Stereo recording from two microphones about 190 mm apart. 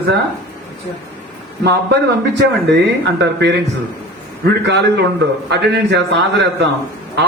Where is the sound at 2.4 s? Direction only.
65° right (ahead or behind).